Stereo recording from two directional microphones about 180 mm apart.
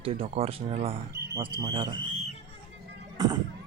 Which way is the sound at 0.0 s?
30° right (ahead or behind).